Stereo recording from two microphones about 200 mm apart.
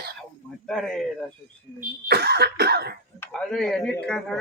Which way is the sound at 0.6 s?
5° left (ahead or behind).